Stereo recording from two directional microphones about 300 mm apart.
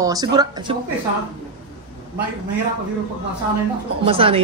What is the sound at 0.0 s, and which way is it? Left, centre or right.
Speech, centre.